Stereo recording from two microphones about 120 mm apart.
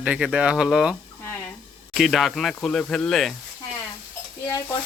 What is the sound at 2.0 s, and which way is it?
Speech, centre (ahead or behind).